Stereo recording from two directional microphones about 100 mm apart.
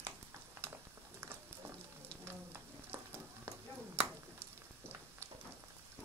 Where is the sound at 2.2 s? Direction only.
25° right (ahead or behind).